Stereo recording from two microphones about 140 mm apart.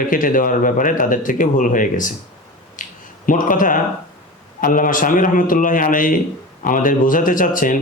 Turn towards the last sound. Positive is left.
turn(degrees=70)  # may be behind; listen again after turning